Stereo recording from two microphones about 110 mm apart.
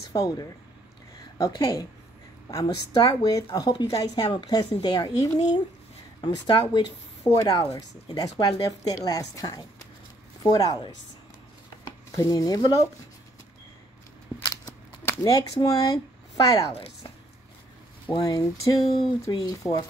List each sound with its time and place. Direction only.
0.1 s speech: 35° left (ahead or behind)
7.2 s speech: 30° left (ahead or behind)
12.2 s speech: 35° left (ahead or behind)
14.4 s a sound: 35° left (ahead or behind)
15.2 s speech: 35° left (ahead or behind)
18.2 s speech: 35° left (ahead or behind)